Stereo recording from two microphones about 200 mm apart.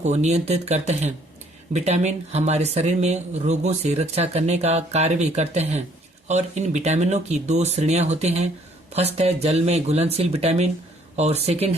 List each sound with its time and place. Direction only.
0.0 s speech: 35° right (ahead or behind)